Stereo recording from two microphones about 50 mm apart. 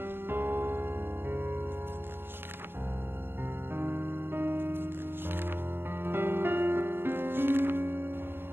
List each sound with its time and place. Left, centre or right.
0.0 s music: right
3.7 s music: right